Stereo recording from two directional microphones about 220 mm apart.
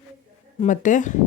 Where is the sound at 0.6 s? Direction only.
35° left (ahead or behind).